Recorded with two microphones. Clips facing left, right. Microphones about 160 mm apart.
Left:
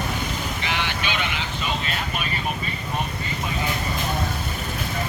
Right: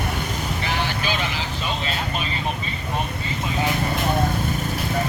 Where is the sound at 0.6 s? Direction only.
40° right (ahead or behind).